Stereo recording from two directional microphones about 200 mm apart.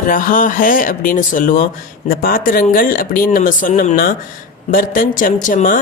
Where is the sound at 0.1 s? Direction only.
40° left (ahead or behind).